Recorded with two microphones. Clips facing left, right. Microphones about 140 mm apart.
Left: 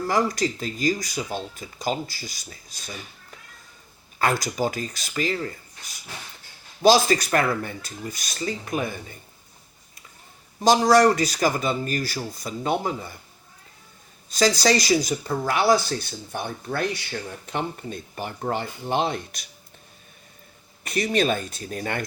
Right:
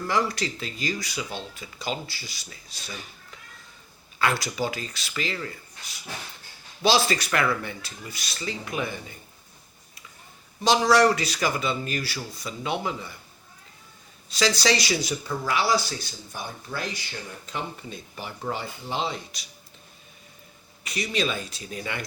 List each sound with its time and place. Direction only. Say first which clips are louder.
0.1 s speech: left 3 dB; 40° left (ahead or behind)
4.2 s speech: left 3 dB; 45° left (ahead or behind)
10.6 s speech: left 3 dB; 45° left (ahead or behind)
14.3 s speech: left 3 dB; 45° left (ahead or behind)
20.8 s speech: left 5 dB; 50° left (ahead or behind)